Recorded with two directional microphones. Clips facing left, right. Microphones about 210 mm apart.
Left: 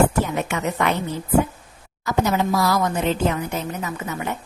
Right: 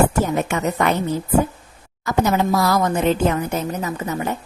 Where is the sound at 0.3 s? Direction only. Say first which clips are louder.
Right 3 dB; 40° right (ahead or behind).